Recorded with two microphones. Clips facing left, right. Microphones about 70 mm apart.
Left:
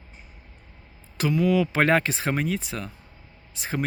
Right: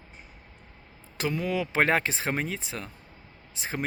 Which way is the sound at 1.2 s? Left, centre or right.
Right.